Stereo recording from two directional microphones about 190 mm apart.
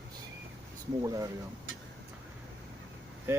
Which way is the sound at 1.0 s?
15° right (ahead or behind).